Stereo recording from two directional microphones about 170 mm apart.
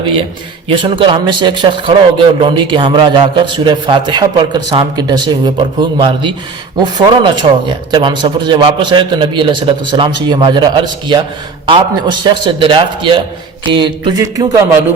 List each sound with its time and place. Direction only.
0.0 s a man's voice: 30° right (ahead or behind)